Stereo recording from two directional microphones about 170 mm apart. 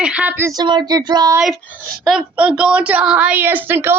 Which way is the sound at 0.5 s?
25° right (ahead or behind).